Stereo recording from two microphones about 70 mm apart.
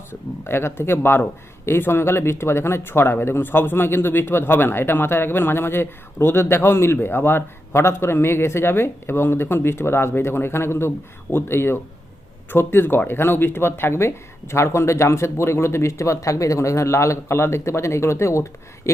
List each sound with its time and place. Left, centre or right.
0.1 s speech: left